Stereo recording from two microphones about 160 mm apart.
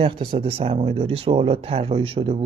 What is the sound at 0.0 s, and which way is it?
Speech, 35° right (ahead or behind).